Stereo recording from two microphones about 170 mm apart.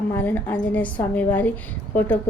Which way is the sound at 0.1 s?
10° left (ahead or behind).